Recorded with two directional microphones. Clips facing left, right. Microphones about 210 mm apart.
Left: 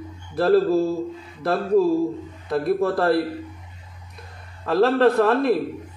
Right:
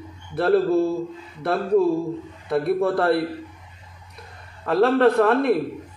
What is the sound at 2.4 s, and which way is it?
Speech, centre (ahead or behind).